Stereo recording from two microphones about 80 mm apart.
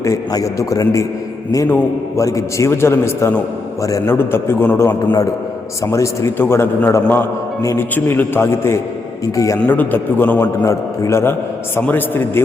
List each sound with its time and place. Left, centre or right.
0.3 s a man's voice: left
2.1 s a man's voice: left
5.8 s a man's voice: left
7.6 s a man's voice: left
7.9 s a man's voice: left
9.2 s a man's voice: left
9.6 s a man's voice: left
10.4 s a man's voice: left